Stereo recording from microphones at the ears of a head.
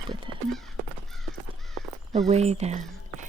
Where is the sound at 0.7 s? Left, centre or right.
Right.